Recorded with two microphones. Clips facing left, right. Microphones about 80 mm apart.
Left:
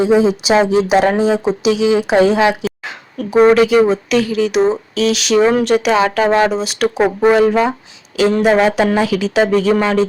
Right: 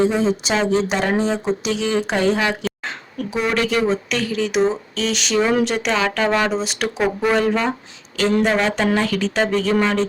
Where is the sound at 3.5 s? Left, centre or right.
Centre.